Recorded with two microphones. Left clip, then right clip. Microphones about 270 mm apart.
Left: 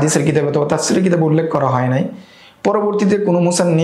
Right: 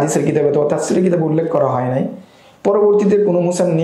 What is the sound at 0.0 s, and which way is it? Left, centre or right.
Speech, left.